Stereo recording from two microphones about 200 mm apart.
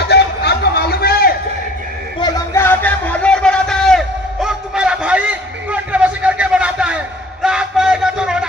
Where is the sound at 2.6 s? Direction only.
10° left (ahead or behind).